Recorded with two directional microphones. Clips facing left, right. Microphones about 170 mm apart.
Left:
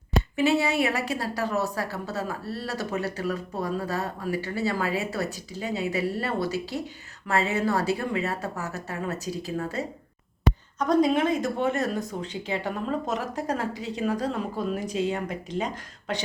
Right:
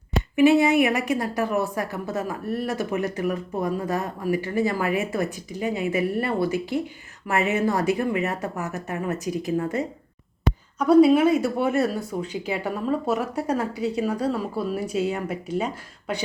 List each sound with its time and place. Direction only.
0.3 s speech: 15° right (ahead or behind)
10.8 s speech: 10° right (ahead or behind)